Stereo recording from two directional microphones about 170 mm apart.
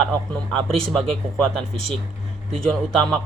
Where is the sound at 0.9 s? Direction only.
5° left (ahead or behind).